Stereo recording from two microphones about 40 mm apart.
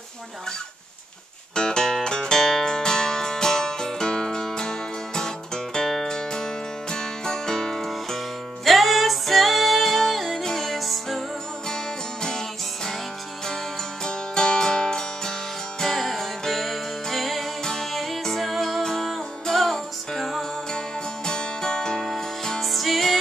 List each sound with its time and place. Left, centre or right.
1.5 s music: centre
11.7 s music: centre
14.0 s music: centre
21.3 s music: centre